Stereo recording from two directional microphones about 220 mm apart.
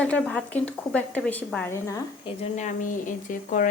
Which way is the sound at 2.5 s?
35° left (ahead or behind).